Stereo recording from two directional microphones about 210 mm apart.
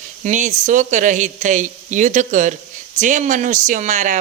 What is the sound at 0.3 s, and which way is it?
Speech, 35° right (ahead or behind).